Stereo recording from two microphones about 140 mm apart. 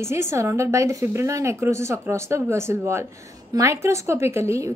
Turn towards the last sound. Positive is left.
turn(degrees=-20)  # may be behind; listen again after turning